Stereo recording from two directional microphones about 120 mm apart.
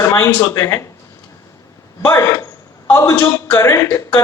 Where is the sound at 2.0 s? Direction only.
25° left (ahead or behind).